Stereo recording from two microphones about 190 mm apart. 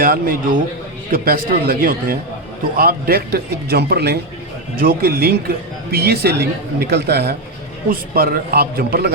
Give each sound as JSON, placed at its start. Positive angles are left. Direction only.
{"t": 0.0, "sound": "a man's voice", "side_deg": -50}